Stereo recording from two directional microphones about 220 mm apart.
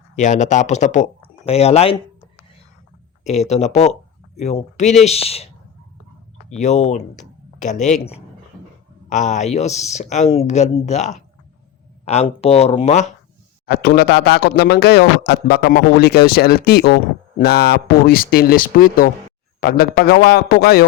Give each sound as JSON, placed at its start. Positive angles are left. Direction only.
{"t": 0.2, "sound": "speech", "side_deg": 35}
{"t": 3.2, "sound": "speech", "side_deg": 30}
{"t": 6.5, "sound": "speech", "side_deg": 30}
{"t": 13.7, "sound": "speech", "side_deg": 45}